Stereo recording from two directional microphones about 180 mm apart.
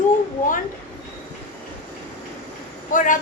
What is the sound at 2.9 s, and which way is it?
Speech, 45° left (ahead or behind).